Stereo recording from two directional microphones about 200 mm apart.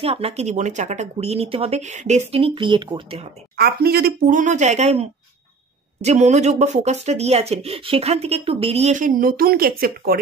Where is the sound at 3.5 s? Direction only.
50° right (ahead or behind).